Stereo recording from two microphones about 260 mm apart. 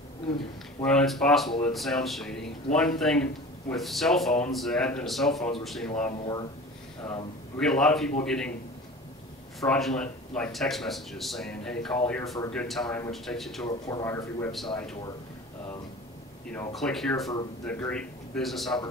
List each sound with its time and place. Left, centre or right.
0.8 s speech: centre
6.1 s speech: centre
9.6 s speech: centre
13.1 s speech: centre
13.7 s speech: centre
16.7 s speech: centre